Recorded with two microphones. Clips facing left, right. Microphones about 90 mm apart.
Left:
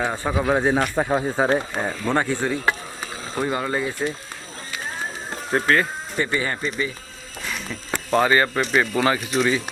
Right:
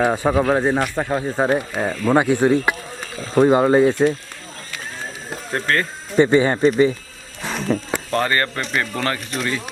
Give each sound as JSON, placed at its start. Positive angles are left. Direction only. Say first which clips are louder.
{"t": 0.0, "sound": "speech", "louder": "right 6 dB", "side_deg": -15}
{"t": 0.5, "sound": "speech", "louder": "right 1 dB", "side_deg": 0}
{"t": 1.5, "sound": "speech", "louder": "right 2 dB", "side_deg": -5}
{"t": 3.3, "sound": "speech", "louder": "right 11 dB", "side_deg": -30}
{"t": 5.3, "sound": "music", "louder": "left 2 dB", "side_deg": 5}
{"t": 6.1, "sound": "speech", "louder": "right 10 dB", "side_deg": -25}
{"t": 7.4, "sound": "a sound", "louder": "right 10 dB", "side_deg": -40}
{"t": 7.9, "sound": "a sound", "louder": "left 1 dB", "side_deg": 0}
{"t": 8.2, "sound": "speech", "louder": "left 5 dB", "side_deg": 10}